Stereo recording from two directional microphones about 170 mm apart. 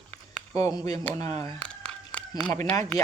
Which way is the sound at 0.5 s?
20° left (ahead or behind).